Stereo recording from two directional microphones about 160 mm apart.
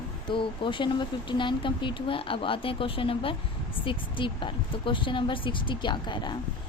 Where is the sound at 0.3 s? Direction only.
30° left (ahead or behind).